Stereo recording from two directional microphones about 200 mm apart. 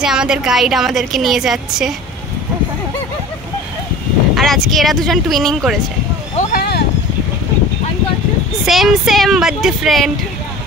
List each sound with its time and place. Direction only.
0.0 s a woman's voice: 5° right (ahead or behind)
4.4 s a woman's voice: centre (ahead or behind)
6.5 s a sound: 50° left (ahead or behind)
8.6 s a woman's voice: centre (ahead or behind)